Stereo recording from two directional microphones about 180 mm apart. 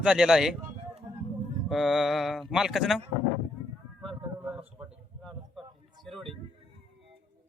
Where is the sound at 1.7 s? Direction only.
Centre (ahead or behind).